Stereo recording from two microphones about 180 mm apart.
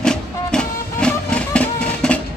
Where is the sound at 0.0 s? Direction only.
5° left (ahead or behind).